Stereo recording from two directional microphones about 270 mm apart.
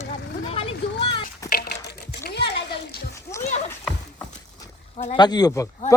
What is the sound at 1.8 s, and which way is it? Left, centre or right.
Typing, left.